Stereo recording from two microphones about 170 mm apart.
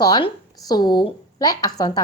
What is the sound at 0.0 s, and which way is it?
A child's voice, 25° left (ahead or behind).